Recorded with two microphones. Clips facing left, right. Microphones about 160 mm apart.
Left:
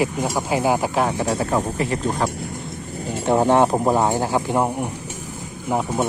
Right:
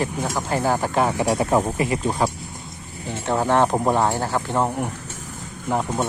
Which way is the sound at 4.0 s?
15° left (ahead or behind).